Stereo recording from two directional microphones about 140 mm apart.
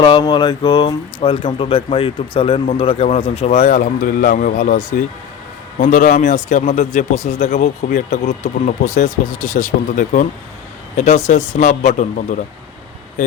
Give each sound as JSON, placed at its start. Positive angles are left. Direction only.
{"t": 0.0, "sound": "speech", "side_deg": 30}
{"t": 10.9, "sound": "speech", "side_deg": 60}